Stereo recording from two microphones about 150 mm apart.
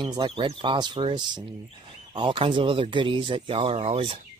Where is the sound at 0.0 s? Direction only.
30° right (ahead or behind).